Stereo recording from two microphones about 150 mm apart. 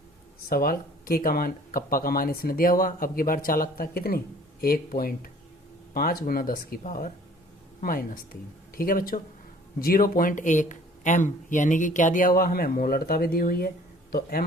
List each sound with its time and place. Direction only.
0.5 s speech: 75° left (ahead or behind)
4.6 s speech: 75° left (ahead or behind)